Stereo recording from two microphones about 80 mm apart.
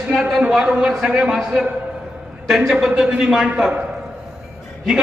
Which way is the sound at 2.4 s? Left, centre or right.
Centre.